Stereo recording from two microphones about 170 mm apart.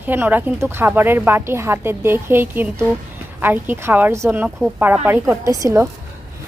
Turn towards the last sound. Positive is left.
turn(degrees=-20)  # may be behind; listen again after turning